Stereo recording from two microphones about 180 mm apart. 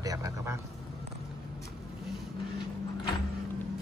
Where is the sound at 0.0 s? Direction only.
20° right (ahead or behind).